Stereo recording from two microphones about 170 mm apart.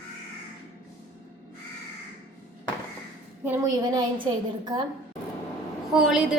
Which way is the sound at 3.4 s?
20° right (ahead or behind).